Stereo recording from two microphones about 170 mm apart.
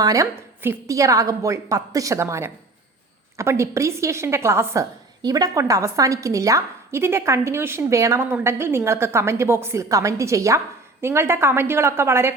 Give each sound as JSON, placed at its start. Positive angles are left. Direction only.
{"t": 0.0, "sound": "a woman's voice", "side_deg": -20}